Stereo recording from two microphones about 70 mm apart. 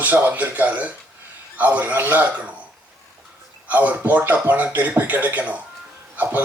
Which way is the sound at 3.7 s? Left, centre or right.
Right.